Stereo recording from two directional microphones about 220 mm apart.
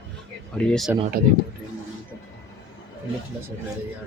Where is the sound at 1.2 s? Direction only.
45° right (ahead or behind).